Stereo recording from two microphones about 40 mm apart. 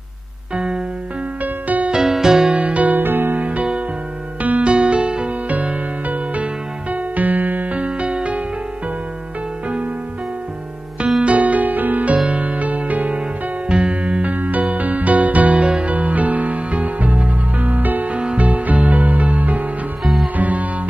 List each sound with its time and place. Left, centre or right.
0.6 s music: right
1.4 s music: right
1.9 s music: centre
2.5 s music: right
3.0 s music: right
3.3 s music: right
5.5 s music: right
11.2 s music: right
13.7 s music: right
18.1 s music: right
18.5 s music: right
20.0 s music: centre
20.3 s music: right